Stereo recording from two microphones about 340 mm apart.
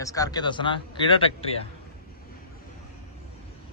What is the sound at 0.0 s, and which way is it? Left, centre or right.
Speech, centre.